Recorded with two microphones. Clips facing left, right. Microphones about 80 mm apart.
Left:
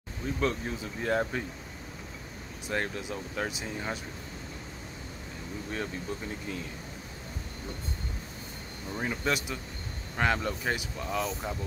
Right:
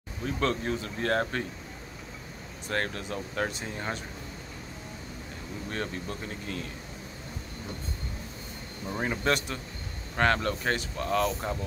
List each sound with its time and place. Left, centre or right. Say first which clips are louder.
0.4 s speech: right 2 dB; centre
2.7 s speech: right 1 dB; centre
5.7 s speech: right 1 dB; centre
8.8 s speech: right 3 dB; centre
9.2 s speech: right 3 dB; centre